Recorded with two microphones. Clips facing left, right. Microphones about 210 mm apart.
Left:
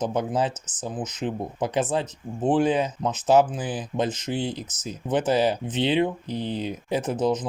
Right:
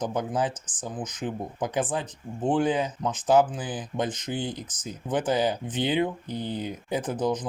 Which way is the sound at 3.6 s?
60° left (ahead or behind).